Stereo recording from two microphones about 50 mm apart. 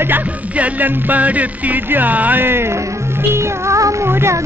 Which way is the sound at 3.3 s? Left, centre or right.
Right.